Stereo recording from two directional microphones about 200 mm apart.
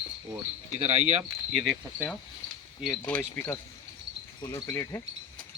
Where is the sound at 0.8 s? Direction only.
35° right (ahead or behind).